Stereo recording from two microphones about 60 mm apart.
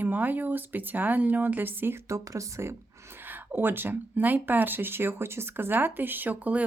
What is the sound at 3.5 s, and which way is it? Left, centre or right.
Speech, right.